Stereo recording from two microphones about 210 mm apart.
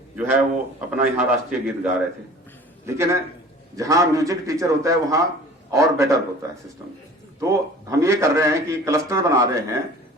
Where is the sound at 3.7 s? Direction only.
15° right (ahead or behind).